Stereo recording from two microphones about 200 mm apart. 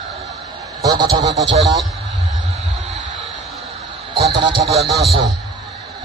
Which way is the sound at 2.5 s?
30° right (ahead or behind).